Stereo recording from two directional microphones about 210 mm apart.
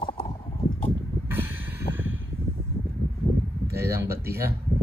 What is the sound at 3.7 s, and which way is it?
Music, 10° right (ahead or behind).